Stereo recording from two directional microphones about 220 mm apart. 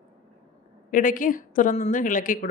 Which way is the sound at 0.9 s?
40° left (ahead or behind).